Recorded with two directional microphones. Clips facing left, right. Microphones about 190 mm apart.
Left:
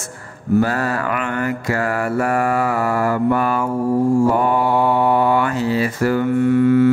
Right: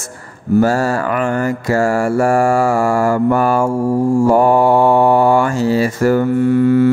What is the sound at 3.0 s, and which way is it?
Mantra, 45° right (ahead or behind).